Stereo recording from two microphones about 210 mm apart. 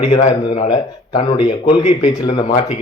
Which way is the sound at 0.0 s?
30° left (ahead or behind).